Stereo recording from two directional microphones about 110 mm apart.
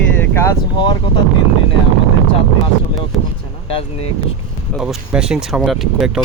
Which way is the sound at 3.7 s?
60° left (ahead or behind).